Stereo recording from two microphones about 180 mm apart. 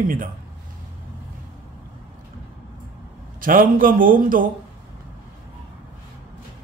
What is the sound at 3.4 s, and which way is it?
A man's voice, 50° right (ahead or behind).